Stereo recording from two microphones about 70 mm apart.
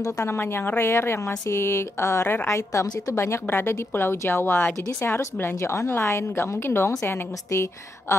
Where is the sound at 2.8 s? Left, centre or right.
Left.